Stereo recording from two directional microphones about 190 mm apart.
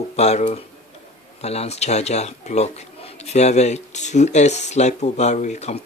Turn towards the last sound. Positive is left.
turn(degrees=35)  # may be behind; listen again after turning